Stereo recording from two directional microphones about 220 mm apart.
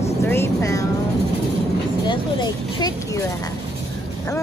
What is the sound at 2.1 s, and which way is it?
Speech, 20° left (ahead or behind).